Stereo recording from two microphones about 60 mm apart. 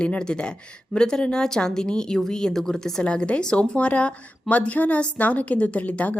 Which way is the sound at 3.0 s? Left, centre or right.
Centre.